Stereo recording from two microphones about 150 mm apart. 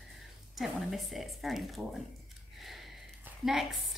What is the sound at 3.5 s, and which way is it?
Speech, 5° right (ahead or behind).